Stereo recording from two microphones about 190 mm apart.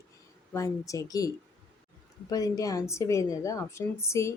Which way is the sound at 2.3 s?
20° left (ahead or behind).